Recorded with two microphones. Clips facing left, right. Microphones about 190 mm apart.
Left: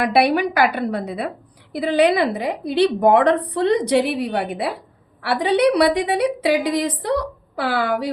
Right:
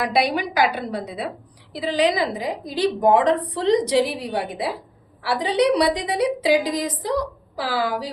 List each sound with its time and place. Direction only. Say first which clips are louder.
0.0 s a woman's voice: left 4 dB; 60° left (ahead or behind)